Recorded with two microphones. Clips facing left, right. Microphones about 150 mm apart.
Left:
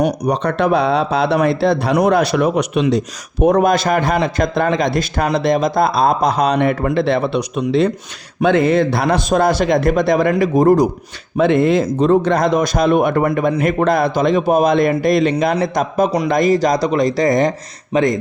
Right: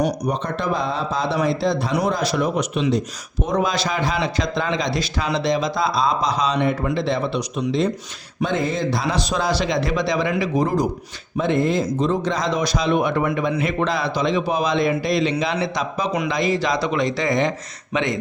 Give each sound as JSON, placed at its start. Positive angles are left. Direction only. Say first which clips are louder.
{"t": 0.0, "sound": "a man's voice", "louder": "left 5 dB", "side_deg": 70}
{"t": 11.3, "sound": "speech", "louder": "left 6 dB", "side_deg": 70}